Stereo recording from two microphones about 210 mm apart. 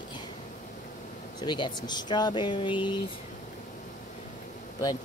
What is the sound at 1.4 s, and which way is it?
Speech, 20° left (ahead or behind).